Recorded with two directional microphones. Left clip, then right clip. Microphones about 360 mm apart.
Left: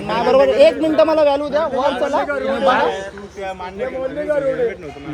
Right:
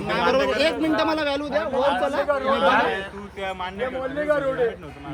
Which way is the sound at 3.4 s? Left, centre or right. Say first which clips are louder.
Left 2 dB; right.